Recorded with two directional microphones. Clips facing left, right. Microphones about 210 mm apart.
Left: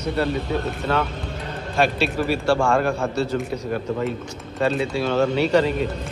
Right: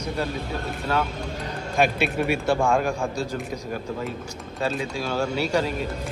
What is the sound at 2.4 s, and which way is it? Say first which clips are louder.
Speech: left 4 dB; 20° right (ahead or behind).